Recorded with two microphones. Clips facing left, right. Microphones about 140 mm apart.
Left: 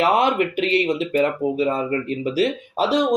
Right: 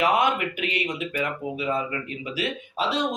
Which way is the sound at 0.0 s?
30° left (ahead or behind).